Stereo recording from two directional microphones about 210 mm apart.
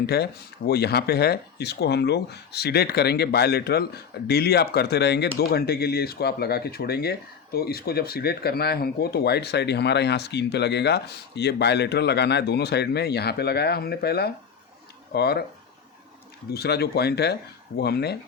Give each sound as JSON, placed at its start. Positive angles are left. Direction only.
{"t": 0.0, "sound": "speech", "side_deg": 50}
{"t": 16.5, "sound": "speech", "side_deg": 50}